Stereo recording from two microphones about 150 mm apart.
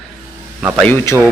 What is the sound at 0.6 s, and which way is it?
Speech, 10° right (ahead or behind).